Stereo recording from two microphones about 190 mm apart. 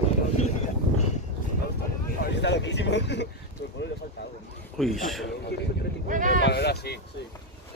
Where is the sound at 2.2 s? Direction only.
65° left (ahead or behind).